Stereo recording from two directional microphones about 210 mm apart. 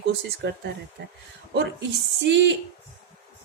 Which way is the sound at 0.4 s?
55° right (ahead or behind).